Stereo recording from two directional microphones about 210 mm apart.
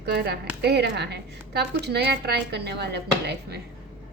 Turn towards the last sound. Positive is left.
turn(degrees=-50)  # may be behind; listen again after turning